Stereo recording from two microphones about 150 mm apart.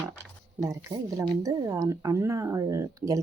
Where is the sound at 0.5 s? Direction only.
20° right (ahead or behind).